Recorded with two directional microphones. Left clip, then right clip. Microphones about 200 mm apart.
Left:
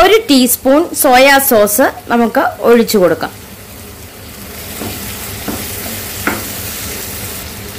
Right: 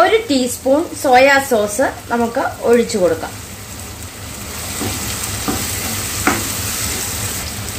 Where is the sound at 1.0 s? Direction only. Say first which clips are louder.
Left 3 dB; 55° left (ahead or behind).